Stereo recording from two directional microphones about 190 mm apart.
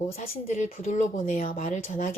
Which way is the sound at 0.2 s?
40° left (ahead or behind).